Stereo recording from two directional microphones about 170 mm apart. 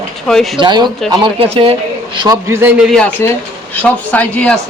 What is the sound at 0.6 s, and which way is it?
A man's voice, 25° right (ahead or behind).